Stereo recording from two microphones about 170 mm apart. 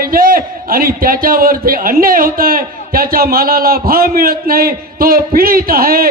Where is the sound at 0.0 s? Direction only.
55° right (ahead or behind).